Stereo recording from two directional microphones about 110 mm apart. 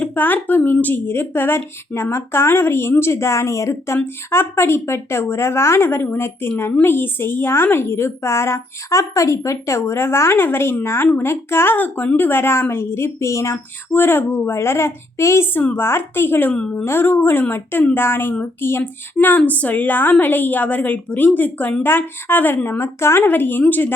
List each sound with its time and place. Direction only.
0.0 s speech: 15° left (ahead or behind)
16.5 s a woman's voice: 10° left (ahead or behind)
16.8 s a woman's voice: 20° left (ahead or behind)